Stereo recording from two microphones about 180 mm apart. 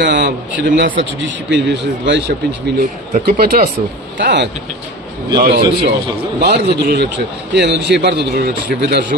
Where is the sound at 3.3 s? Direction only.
55° right (ahead or behind).